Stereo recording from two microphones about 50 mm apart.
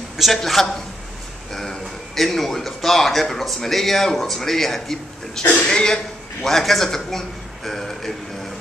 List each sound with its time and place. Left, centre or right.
0.2 s a man's voice: centre
6.4 s a man's voice: centre